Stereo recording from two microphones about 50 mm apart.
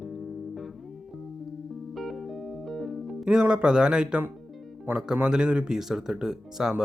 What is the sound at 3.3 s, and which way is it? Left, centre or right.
Speech, centre.